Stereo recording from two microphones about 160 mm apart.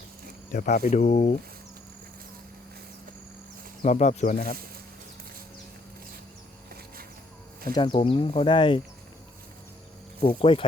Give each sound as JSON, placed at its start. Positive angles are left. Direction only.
{"t": 0.5, "sound": "speech", "side_deg": 60}
{"t": 3.8, "sound": "speech", "side_deg": 50}
{"t": 7.7, "sound": "speech", "side_deg": 30}
{"t": 10.2, "sound": "speech", "side_deg": 40}